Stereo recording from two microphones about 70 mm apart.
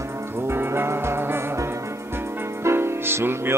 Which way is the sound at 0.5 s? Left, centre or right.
Right.